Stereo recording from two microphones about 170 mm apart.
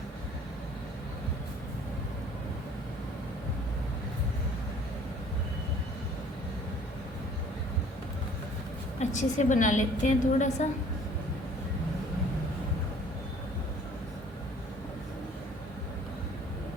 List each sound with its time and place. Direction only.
9.0 s a woman's voice: 45° left (ahead or behind)